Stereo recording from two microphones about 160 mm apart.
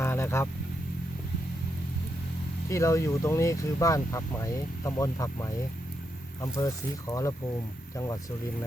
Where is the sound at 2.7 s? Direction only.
20° left (ahead or behind).